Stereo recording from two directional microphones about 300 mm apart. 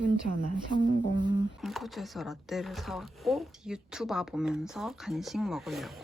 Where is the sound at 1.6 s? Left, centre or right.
Centre.